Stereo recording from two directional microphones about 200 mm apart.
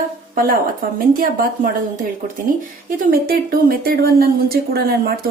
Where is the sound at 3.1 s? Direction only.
45° right (ahead or behind).